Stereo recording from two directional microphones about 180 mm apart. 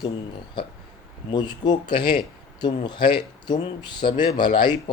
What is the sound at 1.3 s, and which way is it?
Speech, 25° left (ahead or behind).